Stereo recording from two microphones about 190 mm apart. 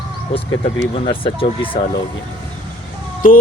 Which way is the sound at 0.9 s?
30° left (ahead or behind).